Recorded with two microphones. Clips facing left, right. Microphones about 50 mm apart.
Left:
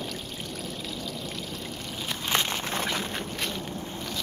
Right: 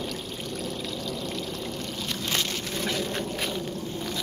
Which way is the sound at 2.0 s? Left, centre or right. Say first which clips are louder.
Left 2 dB; left.